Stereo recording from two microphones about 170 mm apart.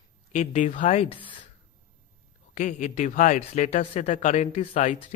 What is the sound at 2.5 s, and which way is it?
Speech, 45° left (ahead or behind).